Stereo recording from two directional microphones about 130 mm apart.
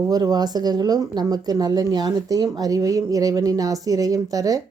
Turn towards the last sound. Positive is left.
turn(degrees=-30)  # may be behind; listen again after turning